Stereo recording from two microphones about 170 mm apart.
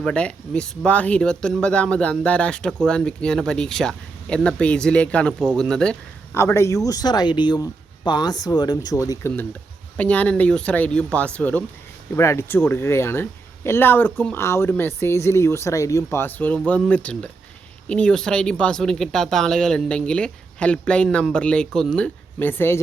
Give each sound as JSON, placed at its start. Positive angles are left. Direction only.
{"t": 0.0, "sound": "speech", "side_deg": 5}
{"t": 6.4, "sound": "speech", "side_deg": 15}